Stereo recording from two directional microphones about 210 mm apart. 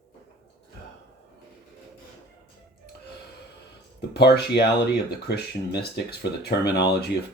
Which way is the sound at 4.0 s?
55° left (ahead or behind).